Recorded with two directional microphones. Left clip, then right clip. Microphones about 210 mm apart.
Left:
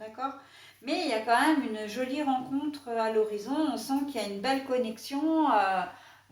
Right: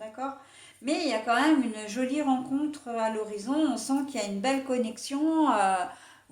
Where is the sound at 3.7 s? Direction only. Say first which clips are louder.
Right 1 dB; 45° right (ahead or behind).